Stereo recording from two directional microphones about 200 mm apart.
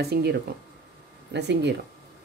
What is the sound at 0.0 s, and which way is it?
Speech, 55° right (ahead or behind).